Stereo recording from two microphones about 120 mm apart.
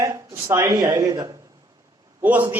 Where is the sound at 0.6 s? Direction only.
35° right (ahead or behind).